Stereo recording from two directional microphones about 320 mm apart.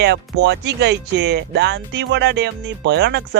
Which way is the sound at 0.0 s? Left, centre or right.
Right.